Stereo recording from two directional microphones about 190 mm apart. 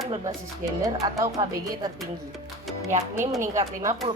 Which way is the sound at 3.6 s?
15° right (ahead or behind).